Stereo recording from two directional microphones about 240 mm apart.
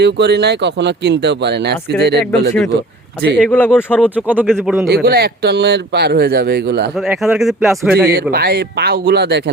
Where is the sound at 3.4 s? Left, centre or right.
Centre.